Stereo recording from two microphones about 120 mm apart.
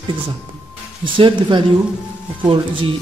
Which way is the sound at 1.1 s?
45° right (ahead or behind).